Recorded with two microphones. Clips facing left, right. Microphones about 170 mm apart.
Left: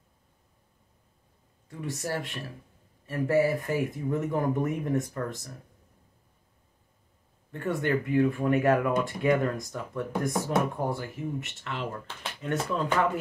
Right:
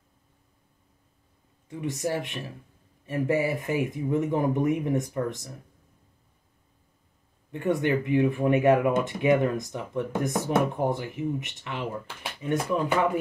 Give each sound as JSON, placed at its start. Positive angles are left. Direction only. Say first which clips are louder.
{"t": 1.7, "sound": "speech", "louder": "right 4 dB", "side_deg": -20}
{"t": 7.5, "sound": "speech", "louder": "right 3 dB", "side_deg": -15}